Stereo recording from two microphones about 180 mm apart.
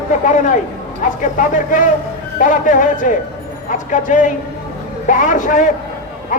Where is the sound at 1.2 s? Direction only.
45° left (ahead or behind).